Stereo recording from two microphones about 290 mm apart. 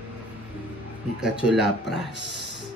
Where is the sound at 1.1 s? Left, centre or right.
Centre.